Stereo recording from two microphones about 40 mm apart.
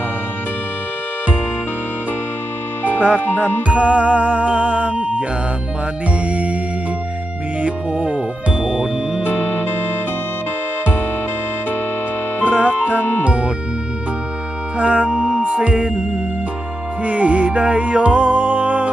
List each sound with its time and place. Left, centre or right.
3.2 s music: left
3.7 s music: right
7.6 s music: right
9.2 s music: left
12.5 s speech: right
12.9 s music: left
13.2 s speech: right
14.8 s music: right